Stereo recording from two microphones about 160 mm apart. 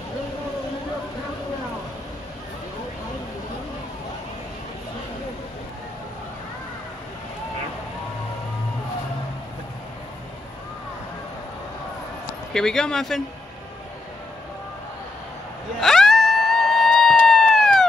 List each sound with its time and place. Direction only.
12.5 s speech: 5° left (ahead or behind)
15.8 s music: centre (ahead or behind)